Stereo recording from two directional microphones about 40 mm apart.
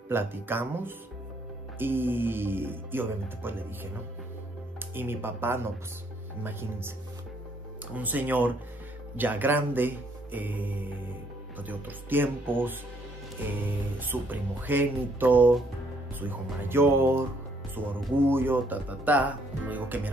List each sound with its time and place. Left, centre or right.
0.1 s speech: right
7.9 s speech: right
13.9 s speech: right
16.7 s speech: right
17.8 s speech: right
18.1 s speech: right
18.7 s speech: right